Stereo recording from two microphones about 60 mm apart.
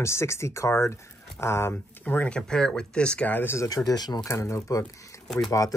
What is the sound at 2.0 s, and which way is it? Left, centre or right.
Speech, left.